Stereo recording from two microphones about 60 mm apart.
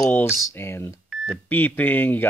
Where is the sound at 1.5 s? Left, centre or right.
Left.